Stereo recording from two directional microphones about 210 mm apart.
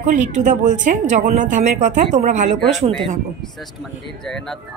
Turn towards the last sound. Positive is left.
turn(degrees=0)  # may be behind; listen again after turning